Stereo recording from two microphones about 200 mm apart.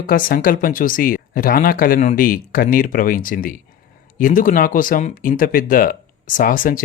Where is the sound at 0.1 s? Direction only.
45° left (ahead or behind).